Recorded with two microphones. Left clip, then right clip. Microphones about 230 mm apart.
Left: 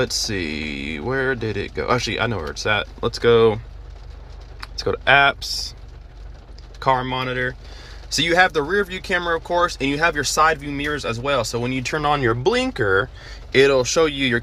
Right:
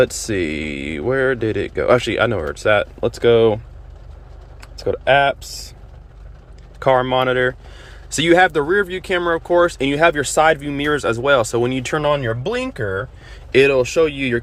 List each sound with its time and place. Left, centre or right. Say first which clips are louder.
0.3 s speech: right 4 dB; centre
4.6 s speech: right 1 dB; centre
6.7 s speech: right 5 dB; centre
13.2 s speech: right 4 dB; centre